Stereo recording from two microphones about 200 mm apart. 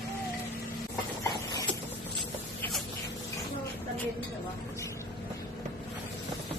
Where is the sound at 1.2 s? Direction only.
15° left (ahead or behind).